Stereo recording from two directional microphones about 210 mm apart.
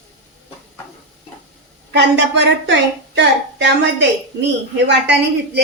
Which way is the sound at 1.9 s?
55° right (ahead or behind).